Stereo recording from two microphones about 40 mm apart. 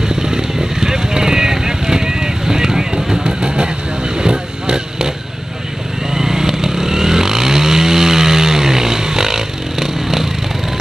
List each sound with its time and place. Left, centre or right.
0.1 s vehicle: centre